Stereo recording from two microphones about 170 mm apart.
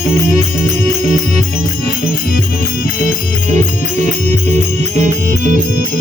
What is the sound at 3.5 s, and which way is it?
Music, 45° right (ahead or behind).